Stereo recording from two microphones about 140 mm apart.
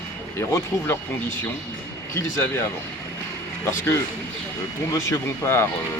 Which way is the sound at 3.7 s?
20° left (ahead or behind).